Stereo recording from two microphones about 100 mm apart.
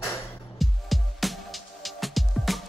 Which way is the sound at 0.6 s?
Centre (ahead or behind).